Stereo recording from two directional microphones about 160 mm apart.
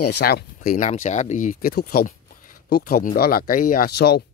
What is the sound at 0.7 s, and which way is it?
Speech, 50° left (ahead or behind).